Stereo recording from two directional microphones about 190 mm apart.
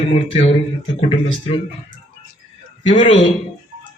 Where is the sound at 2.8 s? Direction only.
35° left (ahead or behind).